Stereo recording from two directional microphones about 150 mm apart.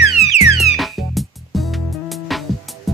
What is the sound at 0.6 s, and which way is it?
Music, centre (ahead or behind).